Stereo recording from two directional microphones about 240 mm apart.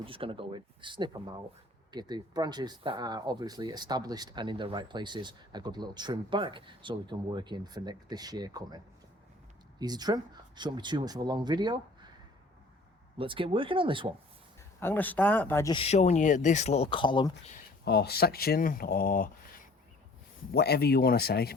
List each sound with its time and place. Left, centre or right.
0.0 s speech: right
13.1 s speech: right
14.8 s speech: centre
17.5 s speech: left